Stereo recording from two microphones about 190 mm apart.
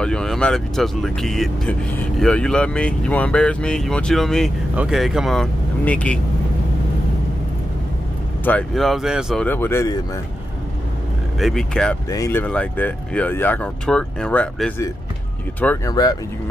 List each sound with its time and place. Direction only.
0.0 s speech: 5° left (ahead or behind)
8.5 s speech: 5° left (ahead or behind)
9.5 s speech: 10° left (ahead or behind)
11.3 s speech: centre (ahead or behind)
12.1 s speech: 15° left (ahead or behind)
15.9 s speech: 20° left (ahead or behind)